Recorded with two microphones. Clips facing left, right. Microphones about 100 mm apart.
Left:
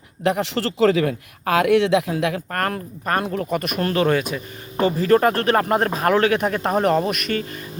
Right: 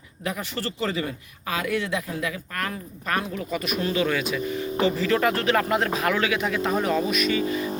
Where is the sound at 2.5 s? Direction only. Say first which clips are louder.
Left 7 dB; 50° left (ahead or behind).